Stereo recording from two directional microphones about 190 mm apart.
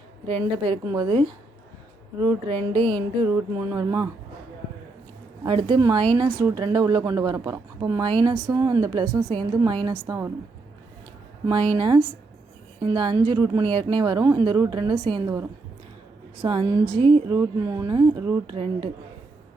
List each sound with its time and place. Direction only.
0.3 s a woman's voice: 25° right (ahead or behind)
5.5 s a woman's voice: 25° right (ahead or behind)
11.7 s a woman's voice: 25° right (ahead or behind)